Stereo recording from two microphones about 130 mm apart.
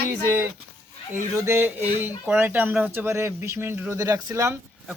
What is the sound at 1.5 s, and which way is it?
Speech, 15° right (ahead or behind).